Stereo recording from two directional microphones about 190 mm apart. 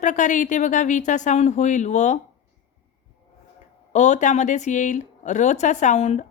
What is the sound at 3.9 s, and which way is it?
A woman's voice, 40° left (ahead or behind).